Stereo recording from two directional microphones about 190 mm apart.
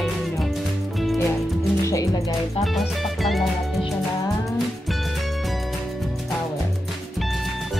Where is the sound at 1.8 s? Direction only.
15° left (ahead or behind).